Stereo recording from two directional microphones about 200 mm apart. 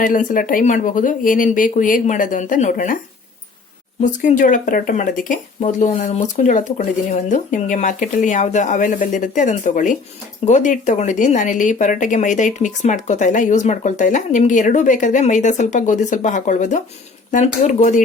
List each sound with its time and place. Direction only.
0.0 s speech: 40° left (ahead or behind)
4.0 s speech: 40° left (ahead or behind)